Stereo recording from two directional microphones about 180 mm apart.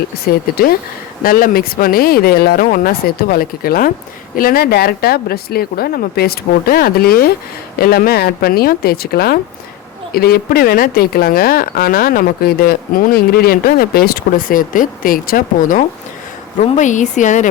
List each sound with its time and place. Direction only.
0.3 s a woman's voice: 55° left (ahead or behind)